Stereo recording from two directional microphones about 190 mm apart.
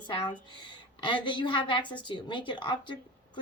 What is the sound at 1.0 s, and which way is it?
A woman's voice, 25° left (ahead or behind).